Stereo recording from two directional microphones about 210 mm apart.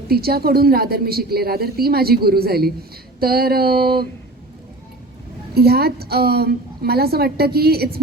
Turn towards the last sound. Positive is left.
turn(degrees=-50)  # may be behind; listen again after turning